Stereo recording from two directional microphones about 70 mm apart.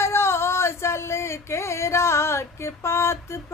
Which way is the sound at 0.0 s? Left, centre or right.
Left.